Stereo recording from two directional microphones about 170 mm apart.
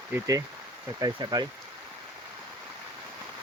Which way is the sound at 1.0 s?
25° right (ahead or behind).